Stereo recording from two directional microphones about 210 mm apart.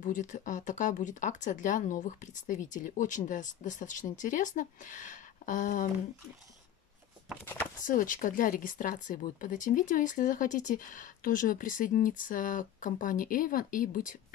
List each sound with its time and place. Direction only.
0.0 s speech: 35° left (ahead or behind)
7.4 s speech: 10° left (ahead or behind)
7.8 s speech: 40° left (ahead or behind)